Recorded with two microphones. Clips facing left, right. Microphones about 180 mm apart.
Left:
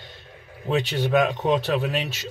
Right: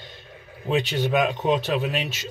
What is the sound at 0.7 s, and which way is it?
Speech, 20° right (ahead or behind).